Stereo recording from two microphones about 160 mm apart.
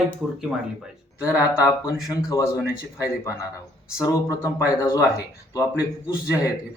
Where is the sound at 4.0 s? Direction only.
20° left (ahead or behind).